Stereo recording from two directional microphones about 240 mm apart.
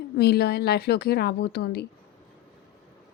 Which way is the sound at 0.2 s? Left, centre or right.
Left.